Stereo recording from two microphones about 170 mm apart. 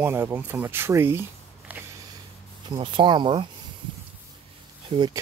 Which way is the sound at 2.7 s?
30° right (ahead or behind).